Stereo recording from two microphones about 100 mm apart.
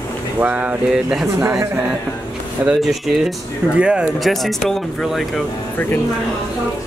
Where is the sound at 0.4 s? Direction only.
15° right (ahead or behind).